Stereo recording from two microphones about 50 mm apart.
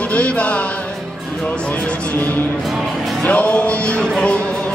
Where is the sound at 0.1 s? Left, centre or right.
Left.